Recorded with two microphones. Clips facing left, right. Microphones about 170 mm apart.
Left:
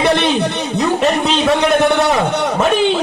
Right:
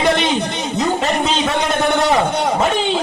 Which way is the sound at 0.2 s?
65° left (ahead or behind).